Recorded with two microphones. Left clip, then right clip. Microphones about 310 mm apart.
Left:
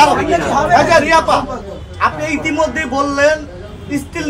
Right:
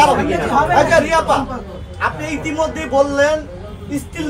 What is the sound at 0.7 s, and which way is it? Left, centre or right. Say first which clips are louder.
A man's voice: left 5 dB; centre.